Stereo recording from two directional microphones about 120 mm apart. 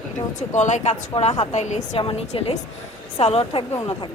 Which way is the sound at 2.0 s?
55° left (ahead or behind).